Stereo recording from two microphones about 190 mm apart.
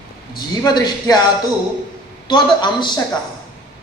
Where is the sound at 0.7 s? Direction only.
20° left (ahead or behind).